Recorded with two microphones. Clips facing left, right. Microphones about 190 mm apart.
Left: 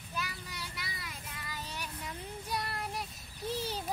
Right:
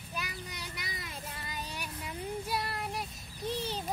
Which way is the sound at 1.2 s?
30° right (ahead or behind).